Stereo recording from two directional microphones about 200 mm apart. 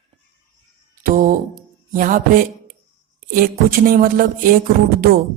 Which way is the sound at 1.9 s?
45° right (ahead or behind).